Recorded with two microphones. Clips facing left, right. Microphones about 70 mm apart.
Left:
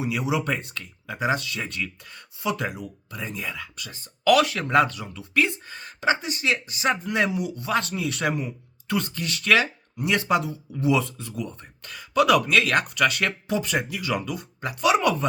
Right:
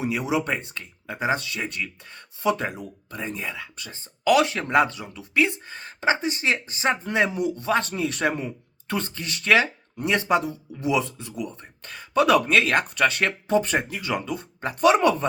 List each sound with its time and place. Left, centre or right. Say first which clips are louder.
0.0 s speech: right 1 dB; right
2.1 s speech: right 4 dB; right
3.4 s speech: even; right
11.8 s speech: even; right